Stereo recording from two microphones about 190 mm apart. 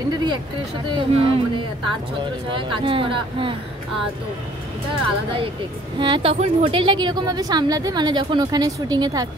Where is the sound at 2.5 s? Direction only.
25° right (ahead or behind).